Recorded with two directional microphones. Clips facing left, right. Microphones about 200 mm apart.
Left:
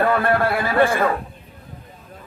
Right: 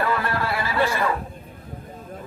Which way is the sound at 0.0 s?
55° left (ahead or behind).